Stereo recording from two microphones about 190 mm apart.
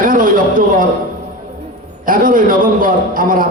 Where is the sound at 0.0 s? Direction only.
45° right (ahead or behind).